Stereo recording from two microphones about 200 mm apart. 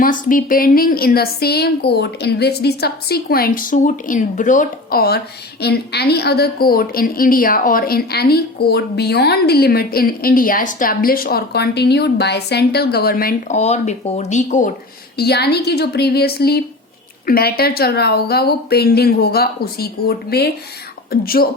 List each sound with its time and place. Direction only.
0.0 s a woman's voice: 45° left (ahead or behind)
15.1 s a woman's voice: 55° left (ahead or behind)